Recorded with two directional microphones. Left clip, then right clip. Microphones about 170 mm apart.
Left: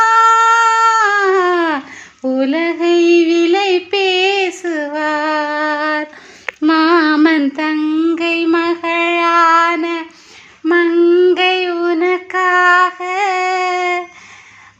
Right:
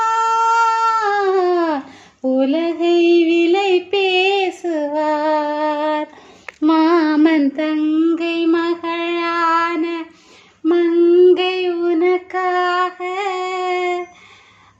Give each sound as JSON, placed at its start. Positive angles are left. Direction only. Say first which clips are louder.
{"t": 0.0, "sound": "a sound", "louder": "left 6 dB", "side_deg": 15}
{"t": 10.7, "sound": "child singing", "louder": "left 2 dB", "side_deg": 15}
{"t": 13.5, "sound": "female singing", "louder": "left 4 dB", "side_deg": 10}